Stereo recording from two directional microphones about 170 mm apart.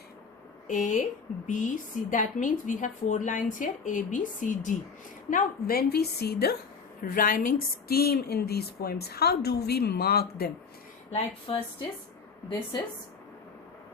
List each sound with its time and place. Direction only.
0.7 s a woman's voice: 50° left (ahead or behind); by 6.6 s 70° left (ahead or behind)
7.0 s a woman's voice: 55° left (ahead or behind)
11.1 s speech: 35° left (ahead or behind)